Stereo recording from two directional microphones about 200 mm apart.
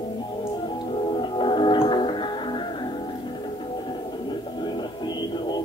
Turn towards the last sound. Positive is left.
turn(degrees=20)  # may be behind; listen again after turning